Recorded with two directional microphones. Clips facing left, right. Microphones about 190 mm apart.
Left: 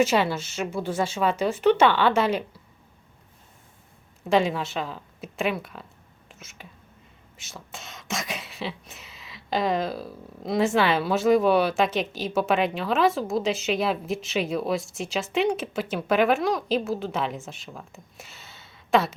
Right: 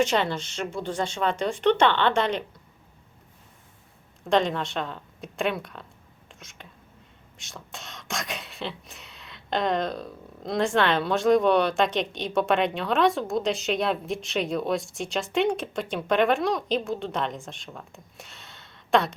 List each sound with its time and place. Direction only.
0.0 s speech: 5° left (ahead or behind)
4.2 s speech: 5° left (ahead or behind)